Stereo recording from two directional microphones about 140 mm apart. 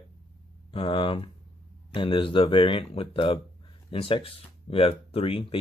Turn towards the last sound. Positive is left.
turn(degrees=40)  # may be behind; listen again after turning